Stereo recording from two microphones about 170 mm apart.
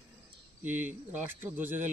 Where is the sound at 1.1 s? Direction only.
10° right (ahead or behind).